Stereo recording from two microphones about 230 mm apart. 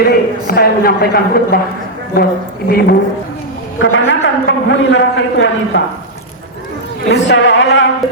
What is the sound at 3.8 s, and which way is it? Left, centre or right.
A man's voice, left.